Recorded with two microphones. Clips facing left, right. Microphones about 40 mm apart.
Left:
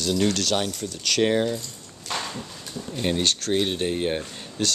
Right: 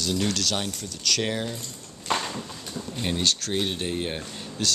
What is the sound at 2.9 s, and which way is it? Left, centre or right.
Speech, centre.